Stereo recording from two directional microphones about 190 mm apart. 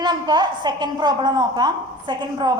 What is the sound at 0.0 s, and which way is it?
Speech, 25° right (ahead or behind).